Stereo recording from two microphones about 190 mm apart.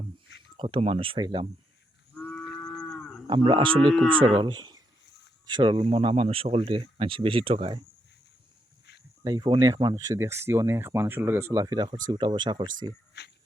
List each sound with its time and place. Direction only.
0.5 s speech: 25° right (ahead or behind)
2.1 s cattle: 10° left (ahead or behind)
3.2 s speech: 25° right (ahead or behind)
9.2 s speech: 20° right (ahead or behind)